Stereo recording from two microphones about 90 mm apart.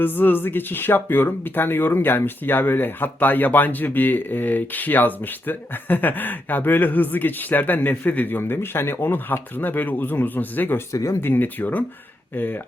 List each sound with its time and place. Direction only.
0.0 s speech: 20° left (ahead or behind)
10.9 s speech: 35° left (ahead or behind)